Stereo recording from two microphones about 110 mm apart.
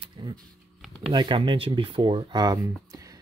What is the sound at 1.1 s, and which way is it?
Speech, 45° right (ahead or behind).